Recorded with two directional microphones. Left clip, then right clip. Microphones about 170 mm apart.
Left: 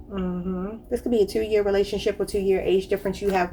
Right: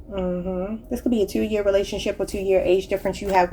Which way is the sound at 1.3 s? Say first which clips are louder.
Right 1 dB; 35° right (ahead or behind).